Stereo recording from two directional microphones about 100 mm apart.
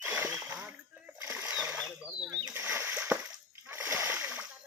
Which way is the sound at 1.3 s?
10° right (ahead or behind).